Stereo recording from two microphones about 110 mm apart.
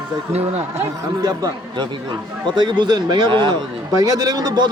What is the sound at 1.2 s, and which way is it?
A man's voice, 40° right (ahead or behind).